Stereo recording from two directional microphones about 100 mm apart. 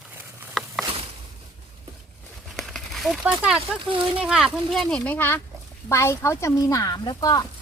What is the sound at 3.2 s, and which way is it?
Speech, 10° right (ahead or behind).